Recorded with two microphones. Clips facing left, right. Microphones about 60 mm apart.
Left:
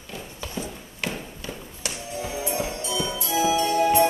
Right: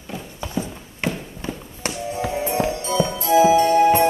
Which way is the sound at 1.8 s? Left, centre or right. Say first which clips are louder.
Right 7 dB; right.